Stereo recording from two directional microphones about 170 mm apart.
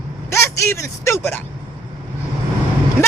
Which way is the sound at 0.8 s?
15° left (ahead or behind).